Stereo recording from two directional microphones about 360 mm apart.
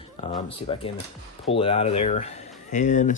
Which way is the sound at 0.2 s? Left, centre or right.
Centre.